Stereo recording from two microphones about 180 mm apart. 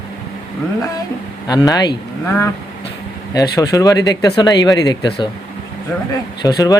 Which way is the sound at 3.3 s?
20° left (ahead or behind).